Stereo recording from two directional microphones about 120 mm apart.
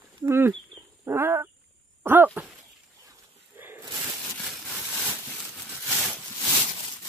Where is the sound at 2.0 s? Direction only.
15° right (ahead or behind).